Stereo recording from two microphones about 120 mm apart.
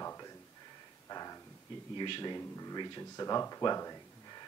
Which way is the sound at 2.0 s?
45° left (ahead or behind).